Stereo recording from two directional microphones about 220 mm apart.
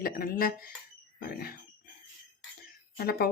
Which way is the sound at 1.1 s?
40° left (ahead or behind).